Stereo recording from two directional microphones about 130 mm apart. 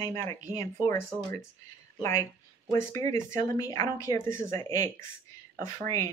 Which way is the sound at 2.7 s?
25° left (ahead or behind).